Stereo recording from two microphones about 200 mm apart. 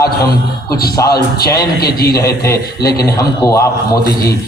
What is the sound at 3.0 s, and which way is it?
Speech, 15° left (ahead or behind).